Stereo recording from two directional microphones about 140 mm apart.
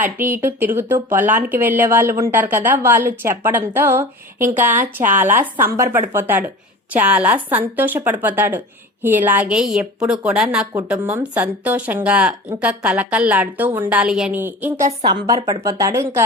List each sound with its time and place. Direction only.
0.0 s a woman's voice: 15° right (ahead or behind)
15.0 s a woman's voice: 30° right (ahead or behind)